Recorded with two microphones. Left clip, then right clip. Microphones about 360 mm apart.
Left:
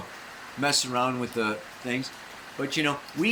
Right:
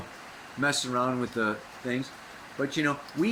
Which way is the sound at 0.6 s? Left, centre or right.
Centre.